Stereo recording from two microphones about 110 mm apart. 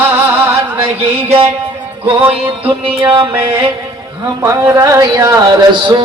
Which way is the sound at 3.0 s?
40° right (ahead or behind).